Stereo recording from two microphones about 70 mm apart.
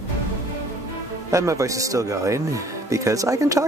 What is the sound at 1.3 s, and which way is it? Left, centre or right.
Speech, right.